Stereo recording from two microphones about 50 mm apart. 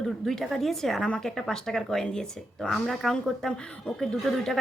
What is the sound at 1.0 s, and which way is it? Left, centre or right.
A woman's voice, left.